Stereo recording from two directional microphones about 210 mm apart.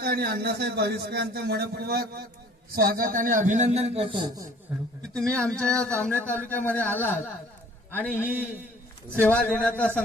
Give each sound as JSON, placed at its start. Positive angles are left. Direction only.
{"t": 0.0, "sound": "a man's voice", "side_deg": -45}
{"t": 5.3, "sound": "a man's voice", "side_deg": 5}